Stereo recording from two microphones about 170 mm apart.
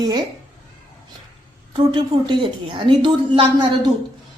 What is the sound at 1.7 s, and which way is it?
A woman's voice, 25° right (ahead or behind).